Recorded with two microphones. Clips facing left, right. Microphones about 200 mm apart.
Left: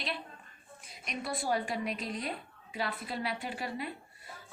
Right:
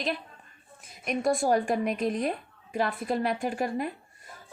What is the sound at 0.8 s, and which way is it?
A woman's voice, 50° right (ahead or behind).